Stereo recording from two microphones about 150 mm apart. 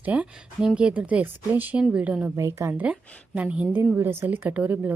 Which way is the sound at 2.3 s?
20° right (ahead or behind).